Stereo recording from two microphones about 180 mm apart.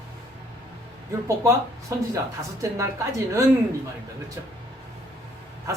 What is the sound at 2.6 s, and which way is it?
Speech, 15° right (ahead or behind).